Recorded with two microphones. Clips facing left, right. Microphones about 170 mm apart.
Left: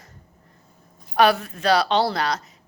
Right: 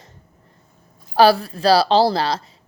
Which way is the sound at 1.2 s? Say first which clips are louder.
Right 4 dB; 35° right (ahead or behind).